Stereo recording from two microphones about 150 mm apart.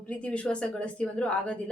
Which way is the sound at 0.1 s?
10° left (ahead or behind).